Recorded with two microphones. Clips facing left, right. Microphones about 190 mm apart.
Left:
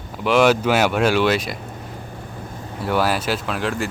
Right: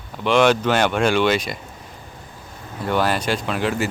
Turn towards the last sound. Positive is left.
turn(degrees=0)  # may be behind; listen again after turning